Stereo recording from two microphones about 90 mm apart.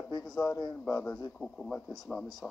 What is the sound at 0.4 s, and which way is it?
Speech, 50° left (ahead or behind).